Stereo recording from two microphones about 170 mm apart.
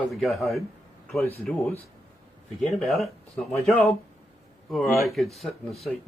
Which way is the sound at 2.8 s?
Centre (ahead or behind).